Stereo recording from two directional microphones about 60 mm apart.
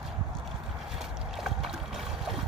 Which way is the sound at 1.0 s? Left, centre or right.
Centre.